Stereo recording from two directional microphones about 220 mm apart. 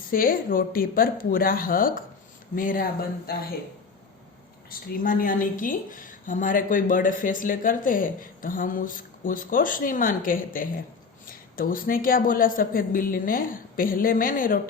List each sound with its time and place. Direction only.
0.1 s a woman's voice: 40° left (ahead or behind)
4.7 s a woman's voice: 40° left (ahead or behind)